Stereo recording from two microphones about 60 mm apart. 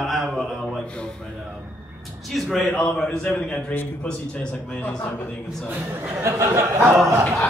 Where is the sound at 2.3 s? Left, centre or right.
Centre.